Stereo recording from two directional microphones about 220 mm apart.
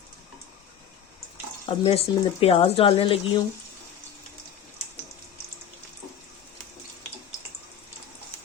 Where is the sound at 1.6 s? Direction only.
25° left (ahead or behind).